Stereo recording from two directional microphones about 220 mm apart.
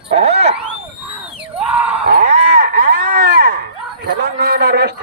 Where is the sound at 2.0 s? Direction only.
40° right (ahead or behind).